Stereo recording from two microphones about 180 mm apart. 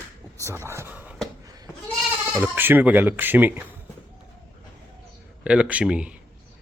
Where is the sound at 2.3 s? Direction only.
10° right (ahead or behind).